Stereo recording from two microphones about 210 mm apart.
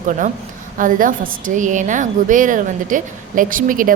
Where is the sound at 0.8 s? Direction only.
40° right (ahead or behind).